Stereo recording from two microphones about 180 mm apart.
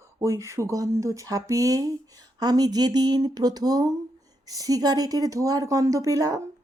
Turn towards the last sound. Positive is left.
turn(degrees=-20)  # may be behind; listen again after turning